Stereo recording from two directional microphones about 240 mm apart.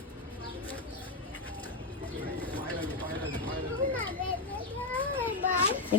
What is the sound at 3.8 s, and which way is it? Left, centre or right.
Children playing, right.